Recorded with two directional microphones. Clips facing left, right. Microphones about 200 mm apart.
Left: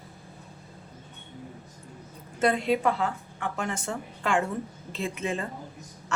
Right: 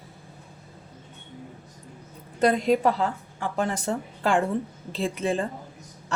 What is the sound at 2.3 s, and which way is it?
A woman's voice, 40° right (ahead or behind).